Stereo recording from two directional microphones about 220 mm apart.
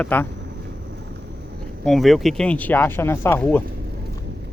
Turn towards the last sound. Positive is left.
turn(degrees=10)  # may be behind; listen again after turning